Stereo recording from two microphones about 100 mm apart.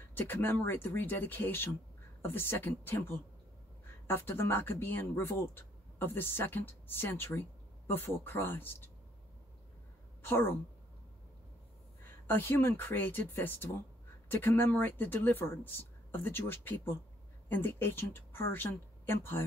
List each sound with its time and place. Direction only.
0.1 s speech: 20° left (ahead or behind)
10.2 s speech: 20° left (ahead or behind)
12.3 s speech: 25° left (ahead or behind)